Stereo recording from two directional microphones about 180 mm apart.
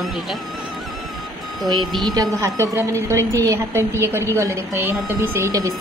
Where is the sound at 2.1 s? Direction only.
20° right (ahead or behind).